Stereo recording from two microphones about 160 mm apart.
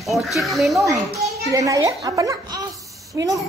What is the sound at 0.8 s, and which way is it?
Speech, 20° right (ahead or behind).